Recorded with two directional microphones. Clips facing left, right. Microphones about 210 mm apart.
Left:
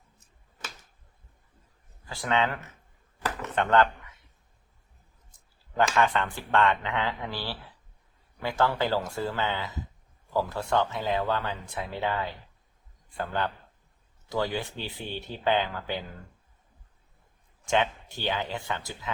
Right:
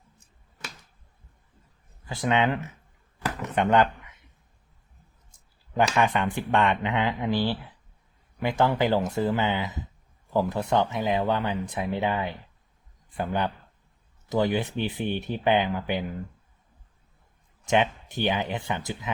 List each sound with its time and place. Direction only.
2.0 s speech: 20° right (ahead or behind)
3.2 s a sound: 15° right (ahead or behind)
5.7 s speech: 15° right (ahead or behind)
17.7 s speech: 20° right (ahead or behind)